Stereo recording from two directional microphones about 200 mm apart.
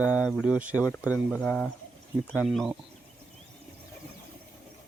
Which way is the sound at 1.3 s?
5° left (ahead or behind).